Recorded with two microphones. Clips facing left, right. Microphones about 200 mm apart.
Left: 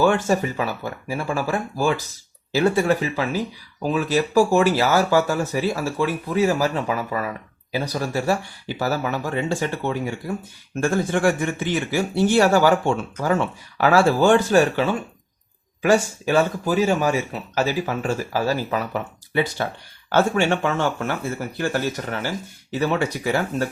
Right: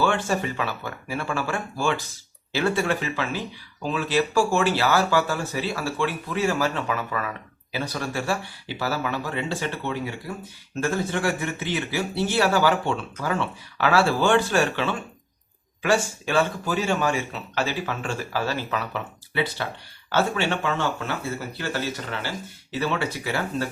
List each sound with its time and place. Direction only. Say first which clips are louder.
0.0 s speech: left 5 dB; 40° left (ahead or behind)